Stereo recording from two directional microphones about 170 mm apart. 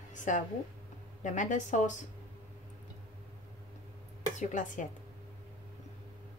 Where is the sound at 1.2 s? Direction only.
45° left (ahead or behind).